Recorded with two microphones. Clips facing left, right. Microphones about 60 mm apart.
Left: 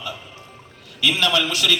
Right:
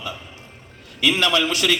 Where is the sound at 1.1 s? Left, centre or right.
Right.